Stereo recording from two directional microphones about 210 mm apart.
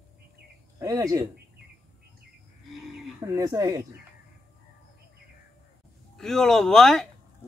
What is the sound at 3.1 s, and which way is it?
Speech, 15° right (ahead or behind).